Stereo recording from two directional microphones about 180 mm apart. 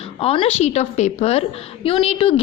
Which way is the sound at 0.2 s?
30° left (ahead or behind).